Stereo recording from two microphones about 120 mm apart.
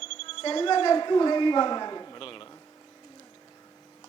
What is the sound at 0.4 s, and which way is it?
A man's voice, 45° left (ahead or behind).